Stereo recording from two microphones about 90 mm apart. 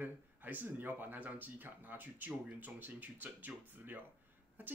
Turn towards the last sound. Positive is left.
turn(degrees=-20)  # may be behind; listen again after turning